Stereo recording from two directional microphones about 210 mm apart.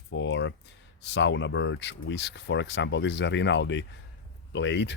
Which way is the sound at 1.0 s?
55° left (ahead or behind).